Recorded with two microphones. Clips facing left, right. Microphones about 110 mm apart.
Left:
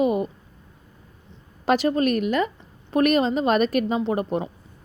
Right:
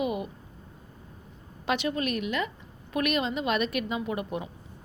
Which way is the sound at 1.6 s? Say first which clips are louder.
Left 8 dB; 40° left (ahead or behind).